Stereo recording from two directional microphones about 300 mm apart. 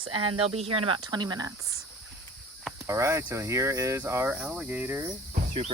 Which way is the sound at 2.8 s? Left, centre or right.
Centre.